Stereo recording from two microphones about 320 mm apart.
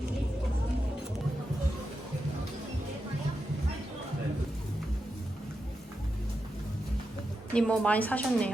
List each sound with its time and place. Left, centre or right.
7.5 s a woman's voice: centre